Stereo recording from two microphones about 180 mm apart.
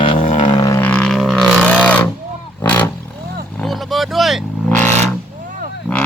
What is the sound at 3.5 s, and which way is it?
Vehicle, centre (ahead or behind).